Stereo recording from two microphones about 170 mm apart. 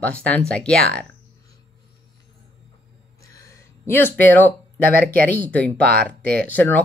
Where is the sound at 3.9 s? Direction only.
10° left (ahead or behind).